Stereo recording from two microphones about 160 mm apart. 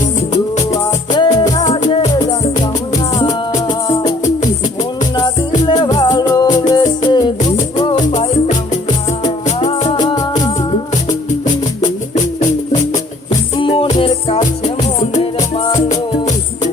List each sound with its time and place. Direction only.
0.7 s music: 25° left (ahead or behind)
1.6 s music: 40° left (ahead or behind); by 3.9 s 25° left (ahead or behind)
5.1 s music: 30° left (ahead or behind)
7.9 s music: 45° left (ahead or behind)
9.7 s music: 40° left (ahead or behind)
10.0 s music: 25° left (ahead or behind)
13.6 s music: 35° left (ahead or behind)